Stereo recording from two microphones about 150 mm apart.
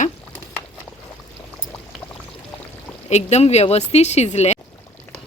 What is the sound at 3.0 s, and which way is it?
Speech, 50° left (ahead or behind).